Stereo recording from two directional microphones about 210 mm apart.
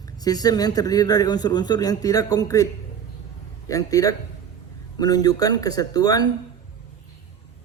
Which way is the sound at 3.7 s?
15° left (ahead or behind).